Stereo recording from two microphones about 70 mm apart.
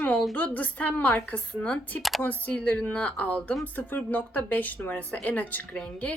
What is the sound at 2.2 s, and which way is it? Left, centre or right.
Speech, left.